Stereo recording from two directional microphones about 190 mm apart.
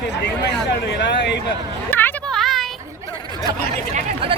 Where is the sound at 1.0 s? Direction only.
65° left (ahead or behind).